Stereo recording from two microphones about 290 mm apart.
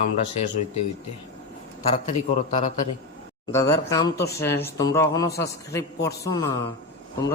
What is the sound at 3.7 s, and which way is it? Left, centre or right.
A man's voice, centre.